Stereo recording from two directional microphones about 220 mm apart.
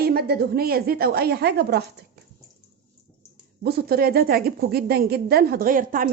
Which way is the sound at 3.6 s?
45° right (ahead or behind).